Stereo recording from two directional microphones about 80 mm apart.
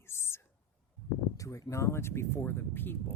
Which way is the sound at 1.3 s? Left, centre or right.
Left.